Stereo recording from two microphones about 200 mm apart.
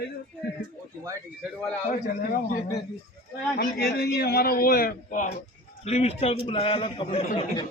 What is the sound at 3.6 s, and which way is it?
A man's voice, 50° left (ahead or behind).